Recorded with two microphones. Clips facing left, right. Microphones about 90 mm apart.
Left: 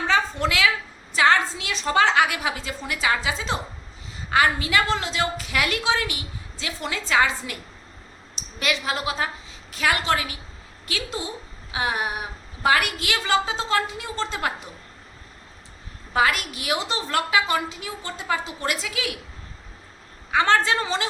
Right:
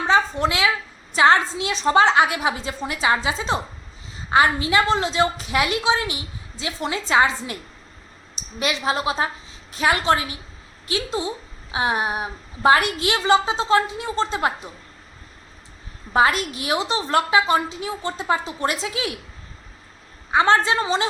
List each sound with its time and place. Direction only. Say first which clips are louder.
0.1 s a sound: right 4 dB; 25° right (ahead or behind)
1.1 s a woman's voice: right 3 dB; 25° right (ahead or behind)
16.1 s a woman's voice: right 3 dB; 30° right (ahead or behind)
20.3 s a woman's voice: right 2 dB; 20° right (ahead or behind)